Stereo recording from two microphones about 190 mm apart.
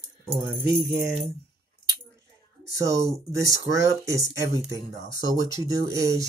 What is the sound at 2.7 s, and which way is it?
Speech, 15° right (ahead or behind).